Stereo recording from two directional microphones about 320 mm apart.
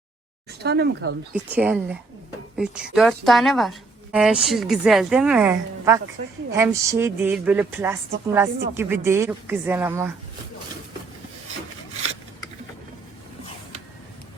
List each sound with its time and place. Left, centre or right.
0.6 s speech: right
1.3 s a woman's voice: centre